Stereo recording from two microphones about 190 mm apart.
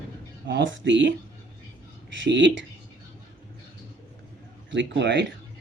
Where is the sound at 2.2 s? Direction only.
70° right (ahead or behind).